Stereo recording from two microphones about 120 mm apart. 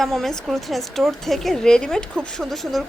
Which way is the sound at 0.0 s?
5° left (ahead or behind).